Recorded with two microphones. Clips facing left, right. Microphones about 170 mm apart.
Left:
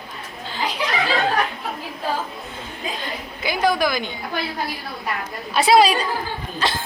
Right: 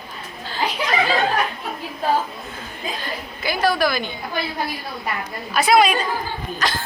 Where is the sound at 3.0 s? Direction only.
20° left (ahead or behind).